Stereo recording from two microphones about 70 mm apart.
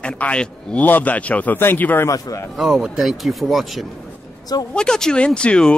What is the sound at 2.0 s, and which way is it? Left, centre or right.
Speech, left.